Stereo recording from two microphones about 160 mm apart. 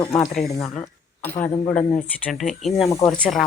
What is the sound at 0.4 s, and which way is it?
Speech, 20° left (ahead or behind).